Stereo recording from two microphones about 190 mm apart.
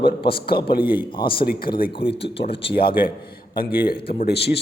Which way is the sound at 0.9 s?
25° left (ahead or behind).